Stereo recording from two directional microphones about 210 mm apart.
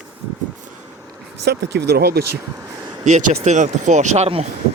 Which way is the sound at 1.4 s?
55° right (ahead or behind).